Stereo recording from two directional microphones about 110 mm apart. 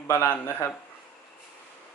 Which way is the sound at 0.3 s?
25° left (ahead or behind).